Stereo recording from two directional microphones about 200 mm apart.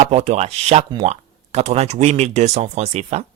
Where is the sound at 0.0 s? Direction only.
35° right (ahead or behind).